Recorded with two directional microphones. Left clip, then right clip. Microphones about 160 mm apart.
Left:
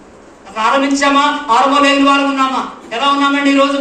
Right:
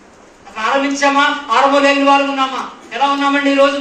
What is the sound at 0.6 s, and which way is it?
A man's voice, 50° left (ahead or behind).